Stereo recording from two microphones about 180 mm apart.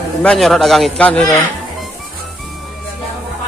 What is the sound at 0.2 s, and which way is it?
A man's voice, 5° left (ahead or behind).